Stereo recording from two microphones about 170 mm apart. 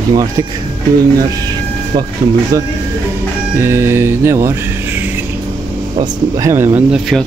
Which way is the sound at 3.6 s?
15° right (ahead or behind).